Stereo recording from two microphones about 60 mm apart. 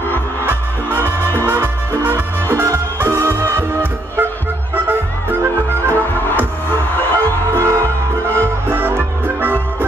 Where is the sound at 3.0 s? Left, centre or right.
Right.